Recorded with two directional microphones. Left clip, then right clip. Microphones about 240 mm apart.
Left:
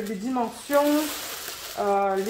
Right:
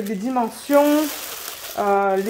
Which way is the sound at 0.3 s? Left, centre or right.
Right.